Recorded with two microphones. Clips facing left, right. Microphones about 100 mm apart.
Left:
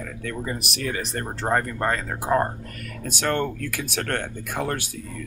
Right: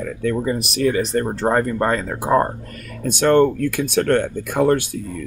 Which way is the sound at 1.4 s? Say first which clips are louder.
Right 3 dB; 45° right (ahead or behind).